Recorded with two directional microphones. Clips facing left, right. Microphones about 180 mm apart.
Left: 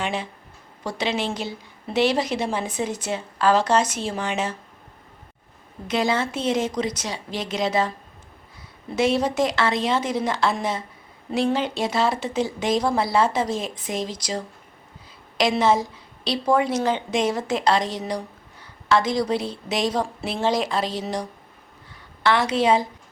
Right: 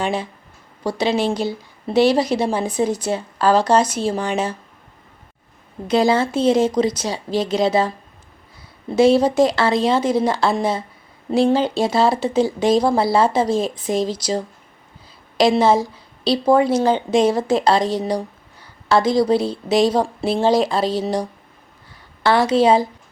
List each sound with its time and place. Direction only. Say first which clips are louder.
0.0 s a woman's voice: right 5 dB; 35° right (ahead or behind)
5.9 s a woman's voice: right 6 dB; 35° right (ahead or behind)
9.0 s a woman's voice: right 7 dB; 30° right (ahead or behind)